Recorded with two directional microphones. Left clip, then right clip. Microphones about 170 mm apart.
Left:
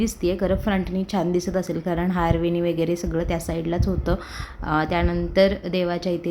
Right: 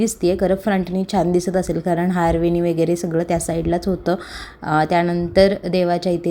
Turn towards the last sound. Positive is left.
turn(degrees=-20)  # may be behind; listen again after turning